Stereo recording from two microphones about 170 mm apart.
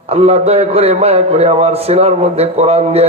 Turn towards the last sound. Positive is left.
turn(degrees=-40)  # may be behind; listen again after turning